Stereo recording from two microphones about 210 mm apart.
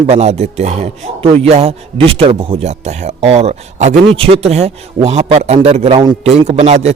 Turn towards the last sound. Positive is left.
turn(degrees=-30)  # may be behind; listen again after turning